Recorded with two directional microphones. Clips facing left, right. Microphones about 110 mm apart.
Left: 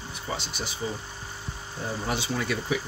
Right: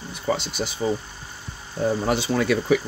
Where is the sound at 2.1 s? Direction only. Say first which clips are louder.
Right 4 dB; 75° right (ahead or behind).